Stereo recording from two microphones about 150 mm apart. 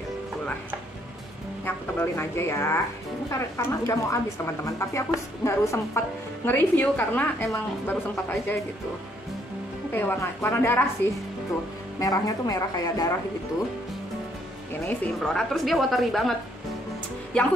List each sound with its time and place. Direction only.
2.0 s a woman's voice: 15° left (ahead or behind)
9.9 s a woman's voice: 15° left (ahead or behind)
15.1 s a woman's voice: centre (ahead or behind)